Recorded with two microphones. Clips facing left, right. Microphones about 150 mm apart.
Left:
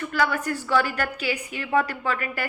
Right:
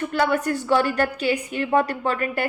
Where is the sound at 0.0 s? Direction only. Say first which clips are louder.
Right 3 dB; 25° right (ahead or behind).